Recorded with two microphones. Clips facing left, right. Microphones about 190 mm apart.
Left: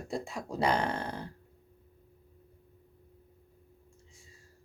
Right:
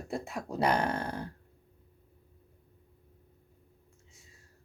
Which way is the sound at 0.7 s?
25° left (ahead or behind).